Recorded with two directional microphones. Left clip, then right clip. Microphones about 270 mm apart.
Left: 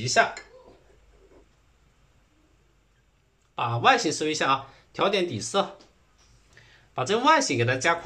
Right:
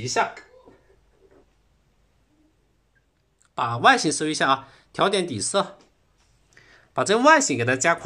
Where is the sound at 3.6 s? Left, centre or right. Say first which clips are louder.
Right 3 dB; right.